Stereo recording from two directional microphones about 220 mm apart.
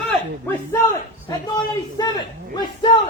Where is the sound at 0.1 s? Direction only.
10° left (ahead or behind).